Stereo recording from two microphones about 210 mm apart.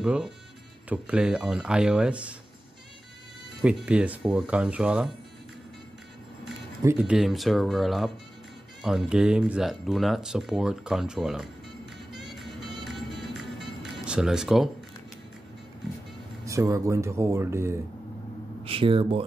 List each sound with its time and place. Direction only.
0.0 s speech: 5° right (ahead or behind)
3.6 s speech: 5° right (ahead or behind)
6.8 s speech: 10° right (ahead or behind)
12.1 s music: centre (ahead or behind)
16.4 s speech: 15° right (ahead or behind)
18.6 s speech: 25° right (ahead or behind)